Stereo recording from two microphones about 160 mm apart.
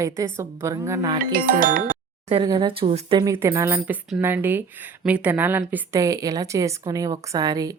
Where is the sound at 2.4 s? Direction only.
30° right (ahead or behind).